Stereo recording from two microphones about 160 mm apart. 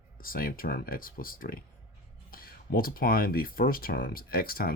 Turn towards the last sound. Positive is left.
turn(degrees=70)  # may be behind; listen again after turning